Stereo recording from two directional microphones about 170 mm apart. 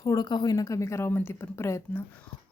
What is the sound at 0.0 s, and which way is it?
A woman's voice, 20° left (ahead or behind).